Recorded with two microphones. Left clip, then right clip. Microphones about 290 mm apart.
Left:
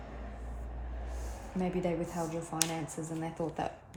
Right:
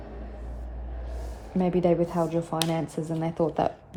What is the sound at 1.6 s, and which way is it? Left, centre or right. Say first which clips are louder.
Speech: right 11 dB; right.